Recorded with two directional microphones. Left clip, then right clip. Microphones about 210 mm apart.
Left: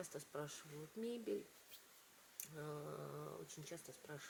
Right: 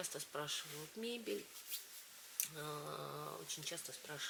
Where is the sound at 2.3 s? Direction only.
5° left (ahead or behind).